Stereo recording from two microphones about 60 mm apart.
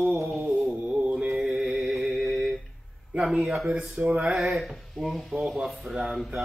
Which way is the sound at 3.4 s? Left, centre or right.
Centre.